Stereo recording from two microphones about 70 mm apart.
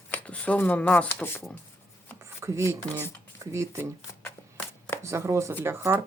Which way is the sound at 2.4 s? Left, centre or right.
Right.